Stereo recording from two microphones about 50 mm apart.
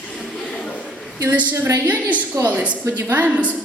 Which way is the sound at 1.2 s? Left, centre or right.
Right.